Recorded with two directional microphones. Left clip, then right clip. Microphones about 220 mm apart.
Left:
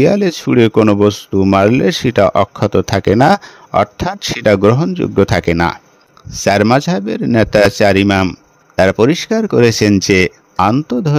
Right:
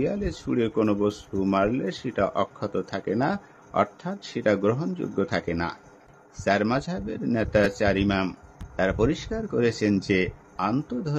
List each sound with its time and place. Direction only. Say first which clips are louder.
0.0 s speech: left 16 dB; 45° left (ahead or behind)